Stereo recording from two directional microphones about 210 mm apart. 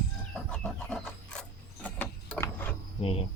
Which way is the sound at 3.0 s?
30° left (ahead or behind).